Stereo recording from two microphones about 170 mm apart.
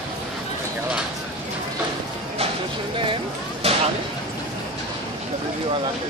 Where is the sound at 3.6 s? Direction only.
35° right (ahead or behind).